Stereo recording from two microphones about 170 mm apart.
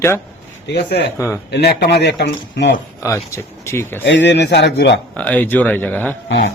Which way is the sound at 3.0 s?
20° left (ahead or behind).